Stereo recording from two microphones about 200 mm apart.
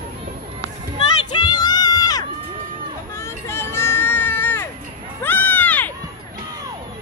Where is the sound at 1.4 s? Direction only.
20° left (ahead or behind).